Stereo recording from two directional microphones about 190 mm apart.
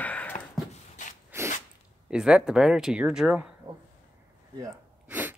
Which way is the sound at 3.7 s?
25° right (ahead or behind).